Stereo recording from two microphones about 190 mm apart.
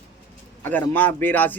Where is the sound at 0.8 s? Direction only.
10° left (ahead or behind).